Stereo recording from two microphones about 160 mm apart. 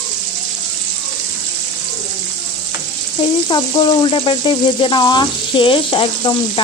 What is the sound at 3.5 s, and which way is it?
A woman's voice, 30° left (ahead or behind).